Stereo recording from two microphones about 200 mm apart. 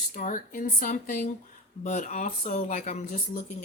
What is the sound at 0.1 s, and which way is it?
Speech, 40° left (ahead or behind).